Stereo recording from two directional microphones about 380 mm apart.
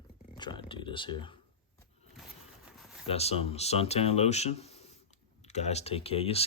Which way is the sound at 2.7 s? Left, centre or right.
Centre.